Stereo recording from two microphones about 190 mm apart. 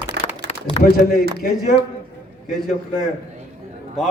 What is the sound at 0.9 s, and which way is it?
Speech, 55° left (ahead or behind).